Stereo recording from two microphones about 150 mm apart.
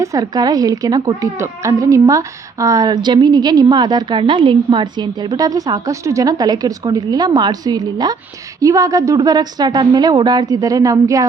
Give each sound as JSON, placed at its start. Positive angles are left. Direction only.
{"t": 0.0, "sound": "a woman's voice", "side_deg": -25}